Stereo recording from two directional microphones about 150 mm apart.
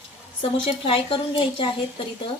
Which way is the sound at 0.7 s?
40° left (ahead or behind).